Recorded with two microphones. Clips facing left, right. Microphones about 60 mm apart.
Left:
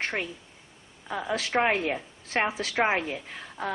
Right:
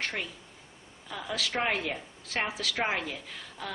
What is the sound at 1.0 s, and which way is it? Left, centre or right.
A woman's voice, left.